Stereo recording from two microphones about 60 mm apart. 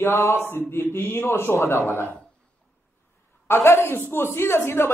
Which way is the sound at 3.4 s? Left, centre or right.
Left.